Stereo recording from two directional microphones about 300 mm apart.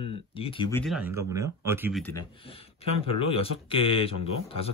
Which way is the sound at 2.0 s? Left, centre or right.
Centre.